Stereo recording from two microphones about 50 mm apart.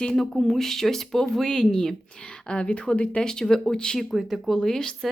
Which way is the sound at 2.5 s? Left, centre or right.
Left.